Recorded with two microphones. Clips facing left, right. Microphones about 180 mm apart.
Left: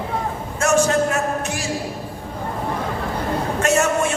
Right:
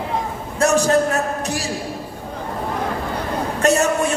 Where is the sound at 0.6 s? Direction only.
35° right (ahead or behind).